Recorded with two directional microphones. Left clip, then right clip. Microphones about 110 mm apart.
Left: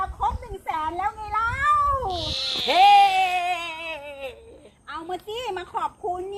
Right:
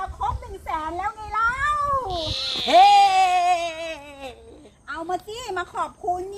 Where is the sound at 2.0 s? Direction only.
Centre (ahead or behind).